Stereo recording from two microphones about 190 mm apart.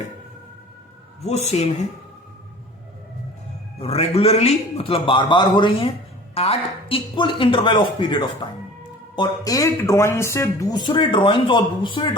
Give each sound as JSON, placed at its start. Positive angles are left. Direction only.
{"t": 1.2, "sound": "speech", "side_deg": 35}
{"t": 3.8, "sound": "speech", "side_deg": 30}